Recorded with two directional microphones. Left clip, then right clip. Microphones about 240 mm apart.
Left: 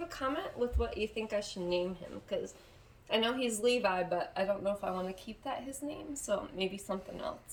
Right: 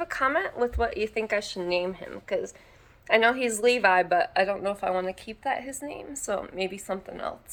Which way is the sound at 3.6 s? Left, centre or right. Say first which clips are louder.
Right 10 dB; centre.